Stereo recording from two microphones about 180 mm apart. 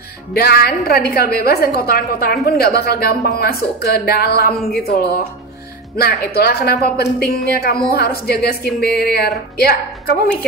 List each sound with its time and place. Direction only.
0.3 s speech: 55° left (ahead or behind)
6.2 s speech: 60° left (ahead or behind)